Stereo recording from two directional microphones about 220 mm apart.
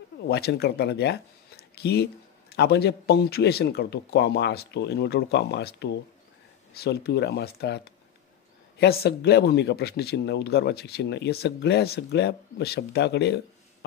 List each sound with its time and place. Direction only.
0.3 s speech: 50° left (ahead or behind)